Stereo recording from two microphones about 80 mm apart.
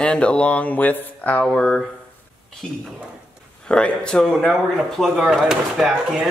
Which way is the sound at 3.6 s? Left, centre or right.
Centre.